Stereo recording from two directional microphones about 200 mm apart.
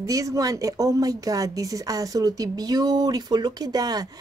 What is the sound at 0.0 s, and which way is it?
Speech, 15° right (ahead or behind).